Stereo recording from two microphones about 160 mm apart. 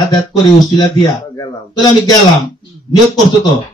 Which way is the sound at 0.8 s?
25° left (ahead or behind).